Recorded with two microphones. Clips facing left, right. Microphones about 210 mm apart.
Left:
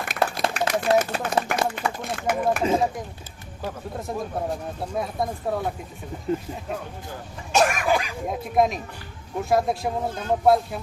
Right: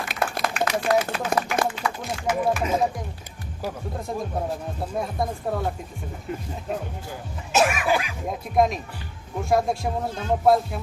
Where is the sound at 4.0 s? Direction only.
Centre (ahead or behind).